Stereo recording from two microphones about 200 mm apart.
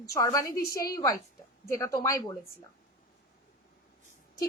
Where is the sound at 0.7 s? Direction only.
50° left (ahead or behind).